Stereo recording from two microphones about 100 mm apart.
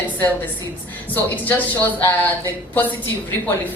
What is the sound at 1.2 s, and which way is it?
Speech, 15° left (ahead or behind).